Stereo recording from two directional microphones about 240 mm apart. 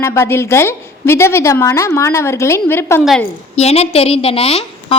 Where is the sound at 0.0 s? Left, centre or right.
Centre.